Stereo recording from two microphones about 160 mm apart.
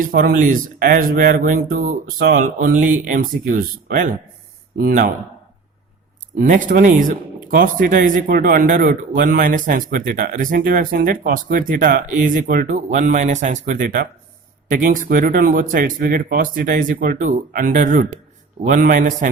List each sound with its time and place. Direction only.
0.0 s speech: 60° right (ahead or behind)
6.4 s speech: 60° right (ahead or behind)